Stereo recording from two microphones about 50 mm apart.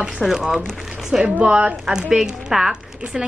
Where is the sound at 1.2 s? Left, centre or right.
Right.